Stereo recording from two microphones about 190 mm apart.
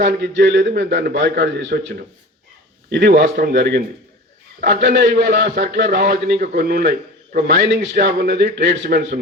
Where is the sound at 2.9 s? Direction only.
60° right (ahead or behind).